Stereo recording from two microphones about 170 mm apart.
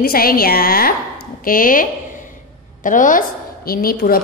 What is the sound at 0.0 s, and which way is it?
A woman's voice, 60° left (ahead or behind).